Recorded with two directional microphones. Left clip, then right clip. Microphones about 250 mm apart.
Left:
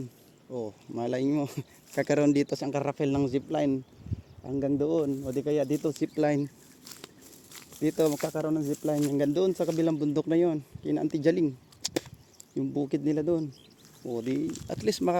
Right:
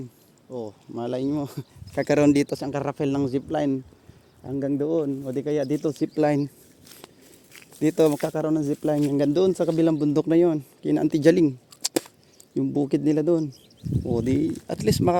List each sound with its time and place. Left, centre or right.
0.5 s speech: centre
2.0 s speech: right
7.8 s a man's voice: right